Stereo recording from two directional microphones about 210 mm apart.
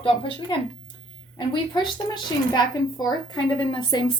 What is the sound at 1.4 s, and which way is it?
Speech, 20° left (ahead or behind).